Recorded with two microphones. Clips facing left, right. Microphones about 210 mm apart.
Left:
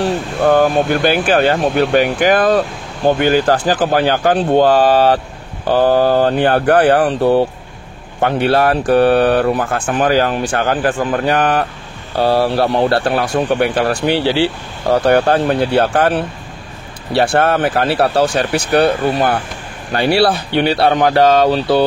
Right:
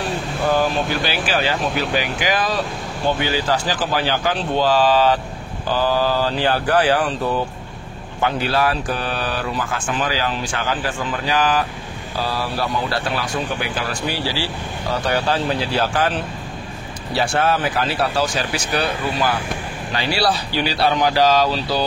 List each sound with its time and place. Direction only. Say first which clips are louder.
0.0 s speech: left 7 dB; 60° left (ahead or behind)